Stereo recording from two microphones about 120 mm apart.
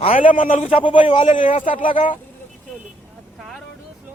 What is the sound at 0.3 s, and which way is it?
Speech, 90° left.